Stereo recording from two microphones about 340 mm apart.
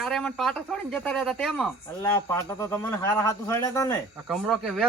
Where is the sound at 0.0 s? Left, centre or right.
Centre.